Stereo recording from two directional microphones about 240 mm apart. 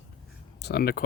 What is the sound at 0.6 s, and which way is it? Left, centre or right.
Speech, left.